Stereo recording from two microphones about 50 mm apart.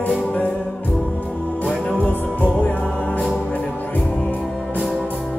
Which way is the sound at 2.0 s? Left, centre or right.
Left.